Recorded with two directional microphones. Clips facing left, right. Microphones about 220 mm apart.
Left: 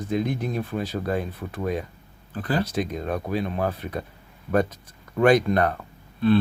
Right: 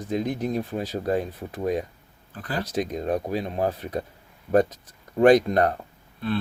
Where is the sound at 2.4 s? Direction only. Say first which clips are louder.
Left 5 dB; 30° left (ahead or behind).